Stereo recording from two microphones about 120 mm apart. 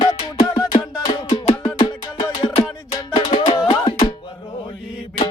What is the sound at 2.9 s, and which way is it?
Music, 40° left (ahead or behind).